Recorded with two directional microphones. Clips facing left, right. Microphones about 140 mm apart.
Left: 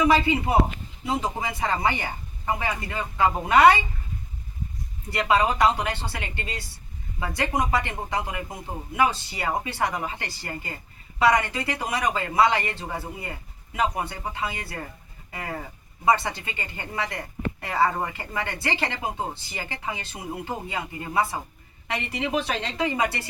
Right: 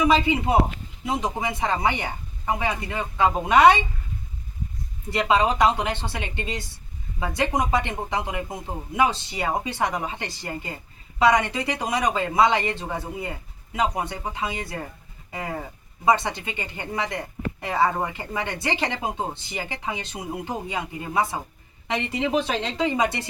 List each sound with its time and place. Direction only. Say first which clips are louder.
0.0 s speech: even; 20° right (ahead or behind)
5.1 s speech: right 1 dB; 20° right (ahead or behind)
15.3 s livestock: right 2 dB; 15° right (ahead or behind)
16.0 s speech: right 1 dB; 20° right (ahead or behind)